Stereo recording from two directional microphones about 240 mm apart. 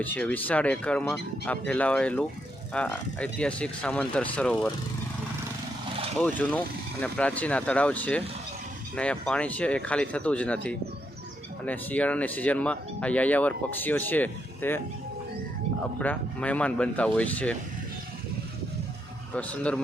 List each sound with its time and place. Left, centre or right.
0.0 s speech: centre
6.1 s speech: centre
16.0 s speech: centre
19.3 s speech: centre